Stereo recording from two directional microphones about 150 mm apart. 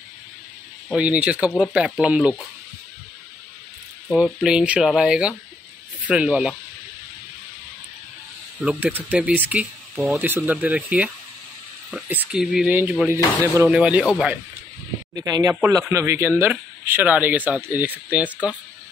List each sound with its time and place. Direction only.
0.8 s speech: 5° right (ahead or behind)
4.1 s speech: 5° right (ahead or behind)
8.5 s speech: 5° right (ahead or behind)
15.1 s speech: 25° right (ahead or behind)